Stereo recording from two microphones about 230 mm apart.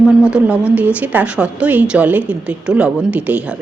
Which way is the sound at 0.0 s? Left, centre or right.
Centre.